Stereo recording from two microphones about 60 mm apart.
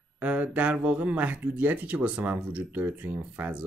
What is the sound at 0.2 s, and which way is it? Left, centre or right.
Speech, right.